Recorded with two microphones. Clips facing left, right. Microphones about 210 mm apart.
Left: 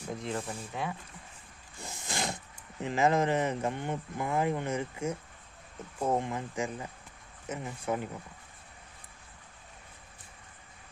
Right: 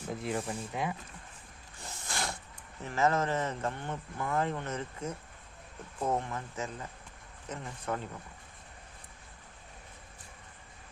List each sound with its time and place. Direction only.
0.1 s speech: 5° right (ahead or behind)
1.8 s a sound: 15° left (ahead or behind)
2.8 s speech: 15° left (ahead or behind)